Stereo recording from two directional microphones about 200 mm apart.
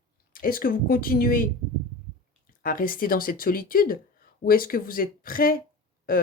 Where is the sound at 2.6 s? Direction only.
45° left (ahead or behind).